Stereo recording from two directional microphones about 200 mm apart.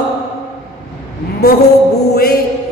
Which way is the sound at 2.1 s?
50° left (ahead or behind).